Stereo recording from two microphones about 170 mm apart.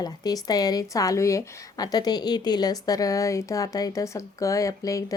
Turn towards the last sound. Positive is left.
turn(degrees=20)  # may be behind; listen again after turning